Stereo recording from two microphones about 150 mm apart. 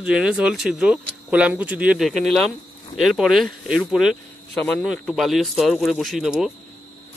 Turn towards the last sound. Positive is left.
turn(degrees=-5)  # may be behind; listen again after turning